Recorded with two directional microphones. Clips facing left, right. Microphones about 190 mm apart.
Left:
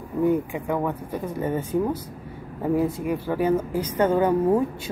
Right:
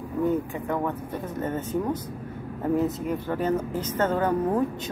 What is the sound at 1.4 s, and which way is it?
Speech, 10° left (ahead or behind).